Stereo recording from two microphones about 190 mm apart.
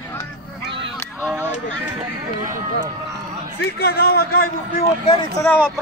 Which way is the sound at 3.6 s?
60° left (ahead or behind).